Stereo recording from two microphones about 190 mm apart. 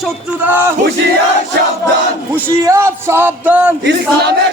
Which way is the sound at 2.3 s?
15° right (ahead or behind).